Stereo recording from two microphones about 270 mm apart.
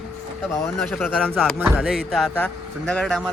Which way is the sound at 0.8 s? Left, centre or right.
Centre.